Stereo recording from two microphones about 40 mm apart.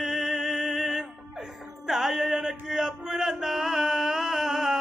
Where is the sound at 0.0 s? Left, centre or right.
Centre.